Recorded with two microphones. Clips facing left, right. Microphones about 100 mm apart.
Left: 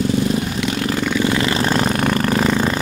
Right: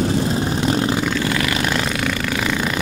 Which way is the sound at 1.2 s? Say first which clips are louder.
Left 3 dB; 25° left (ahead or behind).